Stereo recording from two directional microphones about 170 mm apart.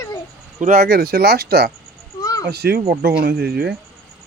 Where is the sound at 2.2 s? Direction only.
20° left (ahead or behind).